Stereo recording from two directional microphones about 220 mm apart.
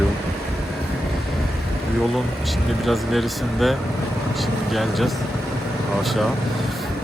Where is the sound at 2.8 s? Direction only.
Centre (ahead or behind).